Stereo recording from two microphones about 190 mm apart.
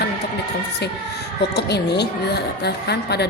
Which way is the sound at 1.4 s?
60° left (ahead or behind).